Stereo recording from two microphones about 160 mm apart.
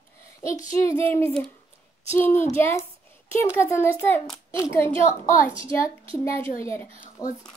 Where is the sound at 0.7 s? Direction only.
20° left (ahead or behind).